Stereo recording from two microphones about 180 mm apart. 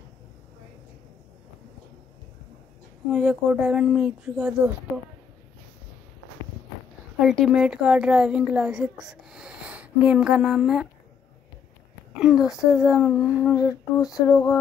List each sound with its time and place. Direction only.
3.1 s a woman's voice: 5° right (ahead or behind)
7.2 s a woman's voice: centre (ahead or behind)
12.2 s a woman's voice: 5° right (ahead or behind)
13.6 s female singing: 20° left (ahead or behind)